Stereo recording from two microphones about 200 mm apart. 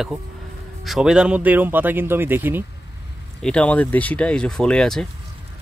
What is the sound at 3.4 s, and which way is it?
Speech, 5° left (ahead or behind).